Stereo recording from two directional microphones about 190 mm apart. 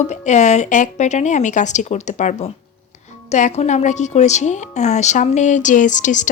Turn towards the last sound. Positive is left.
turn(degrees=40)  # may be behind; listen again after turning